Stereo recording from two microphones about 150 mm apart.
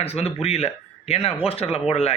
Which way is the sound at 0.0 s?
45° left (ahead or behind).